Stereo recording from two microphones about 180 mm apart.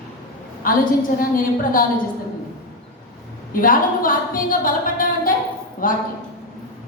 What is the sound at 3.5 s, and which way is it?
A woman's voice, 50° left (ahead or behind).